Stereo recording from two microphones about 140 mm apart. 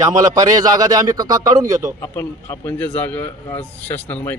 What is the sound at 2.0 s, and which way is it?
A man's voice, 20° left (ahead or behind).